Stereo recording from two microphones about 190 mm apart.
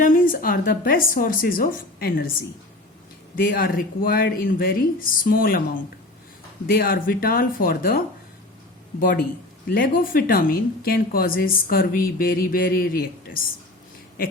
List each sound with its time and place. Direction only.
0.0 s speech: 50° left (ahead or behind)
3.3 s speech: 50° left (ahead or behind)
6.7 s speech: 50° left (ahead or behind)